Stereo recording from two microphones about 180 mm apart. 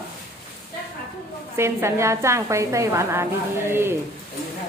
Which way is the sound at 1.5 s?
15° right (ahead or behind).